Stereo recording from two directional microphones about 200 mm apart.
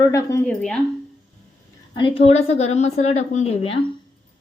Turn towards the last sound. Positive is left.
turn(degrees=30)  # may be behind; listen again after turning